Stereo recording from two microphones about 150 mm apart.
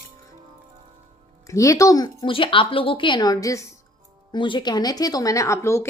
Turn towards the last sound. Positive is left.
turn(degrees=20)  # may be behind; listen again after turning